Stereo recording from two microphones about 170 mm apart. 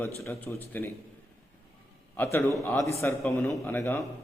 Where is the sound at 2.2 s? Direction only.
15° left (ahead or behind).